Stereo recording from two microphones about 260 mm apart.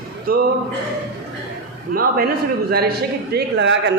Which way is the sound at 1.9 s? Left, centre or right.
Right.